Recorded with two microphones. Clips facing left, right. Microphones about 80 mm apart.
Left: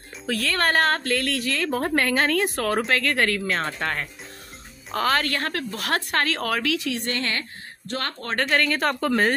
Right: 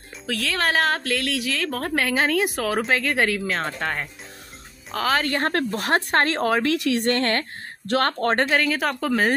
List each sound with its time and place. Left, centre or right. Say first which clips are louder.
0.3 s a woman's voice: left 1 dB; centre
2.0 s a woman's voice: right 1 dB; centre
5.4 s speech: right 5 dB; right
6.7 s speech: right 5 dB; right
8.5 s a woman's voice: even; centre